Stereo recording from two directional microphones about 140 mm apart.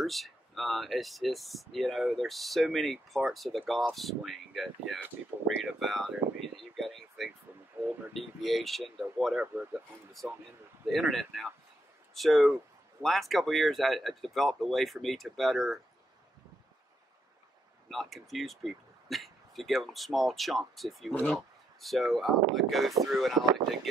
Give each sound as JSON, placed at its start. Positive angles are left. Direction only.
{"t": 0.0, "sound": "speech", "side_deg": 0}
{"t": 6.8, "sound": "a sound", "side_deg": 0}
{"t": 8.1, "sound": "speech", "side_deg": 0}
{"t": 10.9, "sound": "speech", "side_deg": 0}
{"t": 17.8, "sound": "speech", "side_deg": 0}